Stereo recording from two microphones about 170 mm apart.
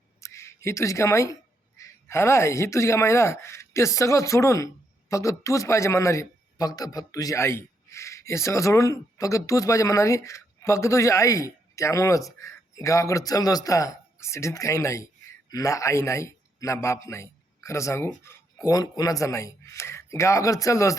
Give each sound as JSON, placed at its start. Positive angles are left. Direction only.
{"t": 0.2, "sound": "speech", "side_deg": 15}